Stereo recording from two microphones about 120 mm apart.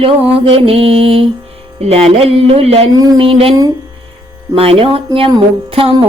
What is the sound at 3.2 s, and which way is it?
Speech, 50° right (ahead or behind).